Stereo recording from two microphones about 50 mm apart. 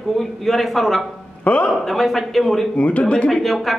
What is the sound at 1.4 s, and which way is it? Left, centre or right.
Speech, left.